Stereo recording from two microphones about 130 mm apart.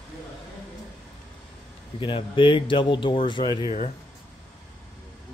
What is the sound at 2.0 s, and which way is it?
Speech, 40° left (ahead or behind).